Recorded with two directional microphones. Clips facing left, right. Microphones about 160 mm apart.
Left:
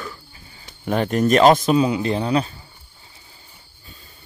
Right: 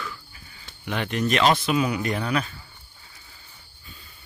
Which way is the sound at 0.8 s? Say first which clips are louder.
Left 7 dB; 40° left (ahead or behind).